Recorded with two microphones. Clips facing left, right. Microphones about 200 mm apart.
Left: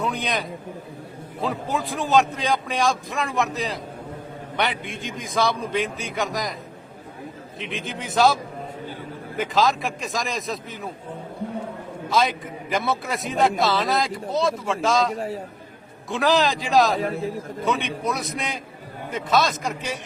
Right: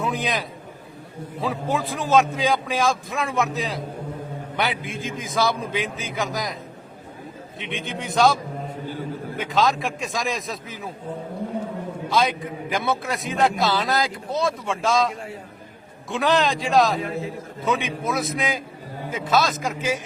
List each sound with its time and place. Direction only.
0.0 s a man's voice: centre (ahead or behind)
7.6 s a man's voice: centre (ahead or behind)
9.4 s a man's voice: centre (ahead or behind)
12.0 s a man's voice: centre (ahead or behind)
15.1 s a man's voice: 35° left (ahead or behind)
16.0 s a man's voice: centre (ahead or behind)